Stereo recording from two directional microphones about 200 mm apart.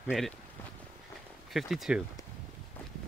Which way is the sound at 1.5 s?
Centre (ahead or behind).